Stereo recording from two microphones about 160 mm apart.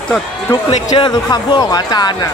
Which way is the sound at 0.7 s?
30° left (ahead or behind).